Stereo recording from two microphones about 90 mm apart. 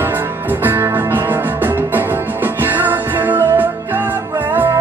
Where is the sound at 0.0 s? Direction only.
20° right (ahead or behind).